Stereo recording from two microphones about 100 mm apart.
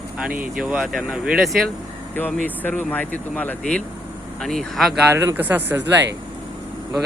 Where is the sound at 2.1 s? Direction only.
15° left (ahead or behind); by 4.9 s centre (ahead or behind).